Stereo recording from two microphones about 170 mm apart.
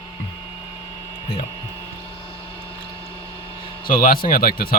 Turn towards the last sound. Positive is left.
turn(degrees=60)  # may be behind; listen again after turning